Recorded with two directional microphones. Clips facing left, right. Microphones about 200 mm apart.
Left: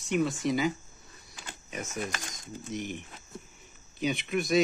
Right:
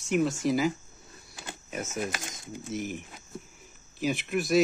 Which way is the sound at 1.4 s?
5° right (ahead or behind).